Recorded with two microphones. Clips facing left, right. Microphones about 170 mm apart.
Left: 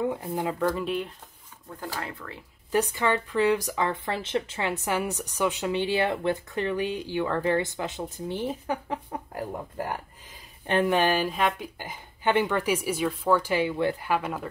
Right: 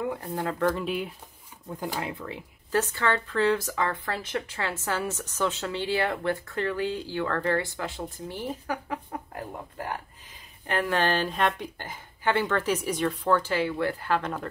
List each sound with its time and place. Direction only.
0.1 s a woman's voice: 15° left (ahead or behind)
0.6 s speech: 5° left (ahead or behind)
1.7 s speech: 20° right (ahead or behind)
2.7 s a woman's voice: 15° left (ahead or behind)
10.7 s a woman's voice: 20° left (ahead or behind); by 11.9 s 5° left (ahead or behind)
12.2 s a woman's voice: 20° left (ahead or behind)